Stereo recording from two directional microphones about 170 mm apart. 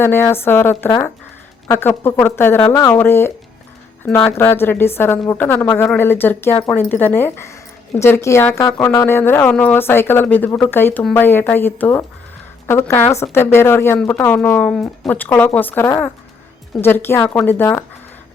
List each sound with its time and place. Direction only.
0.0 s speech: 15° left (ahead or behind)